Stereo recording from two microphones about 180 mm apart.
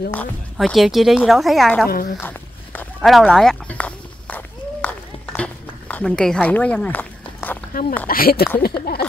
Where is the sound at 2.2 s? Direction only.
10° left (ahead or behind).